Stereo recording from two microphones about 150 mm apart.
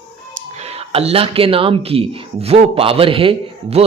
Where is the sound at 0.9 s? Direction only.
40° right (ahead or behind).